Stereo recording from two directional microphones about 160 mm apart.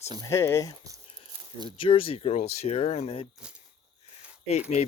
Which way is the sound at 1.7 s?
35° left (ahead or behind).